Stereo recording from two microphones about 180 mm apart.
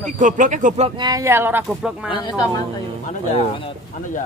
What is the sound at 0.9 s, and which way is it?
Speech, 20° right (ahead or behind).